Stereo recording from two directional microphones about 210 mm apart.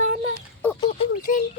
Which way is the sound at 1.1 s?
40° left (ahead or behind).